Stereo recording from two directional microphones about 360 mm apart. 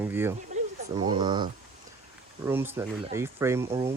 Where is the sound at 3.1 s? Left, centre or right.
Centre.